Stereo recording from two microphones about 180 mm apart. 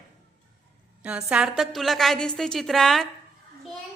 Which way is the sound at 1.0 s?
5° right (ahead or behind).